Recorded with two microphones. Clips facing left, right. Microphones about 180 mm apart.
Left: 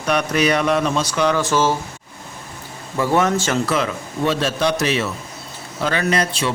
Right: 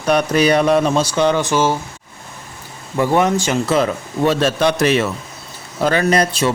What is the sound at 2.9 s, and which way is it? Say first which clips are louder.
Speech: right 2 dB; 15° right (ahead or behind).